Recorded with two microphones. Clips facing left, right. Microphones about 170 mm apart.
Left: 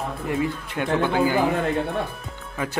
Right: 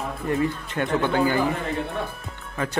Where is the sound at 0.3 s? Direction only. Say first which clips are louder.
Right 2 dB; 10° left (ahead or behind).